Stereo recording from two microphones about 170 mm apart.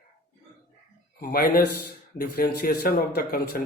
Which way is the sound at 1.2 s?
60° left (ahead or behind).